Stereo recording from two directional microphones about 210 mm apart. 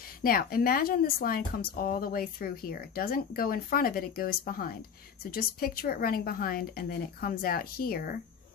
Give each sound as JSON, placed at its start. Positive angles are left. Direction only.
{"t": 0.2, "sound": "speech", "side_deg": 45}